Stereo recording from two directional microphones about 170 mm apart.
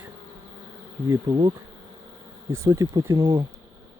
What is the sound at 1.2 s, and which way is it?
Speech, 30° right (ahead or behind).